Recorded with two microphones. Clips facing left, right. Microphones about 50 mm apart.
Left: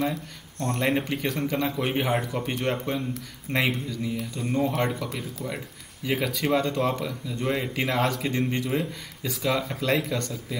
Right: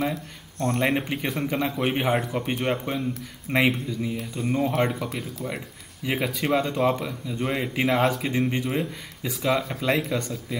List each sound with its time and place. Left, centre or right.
0.0 s speech: centre